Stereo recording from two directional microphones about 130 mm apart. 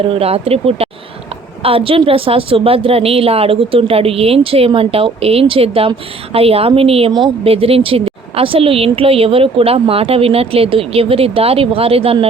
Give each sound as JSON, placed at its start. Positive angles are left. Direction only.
{"t": 0.1, "sound": "a woman's voice", "side_deg": -50}